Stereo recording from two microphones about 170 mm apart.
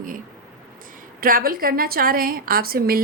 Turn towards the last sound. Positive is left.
turn(degrees=-60)  # may be behind; listen again after turning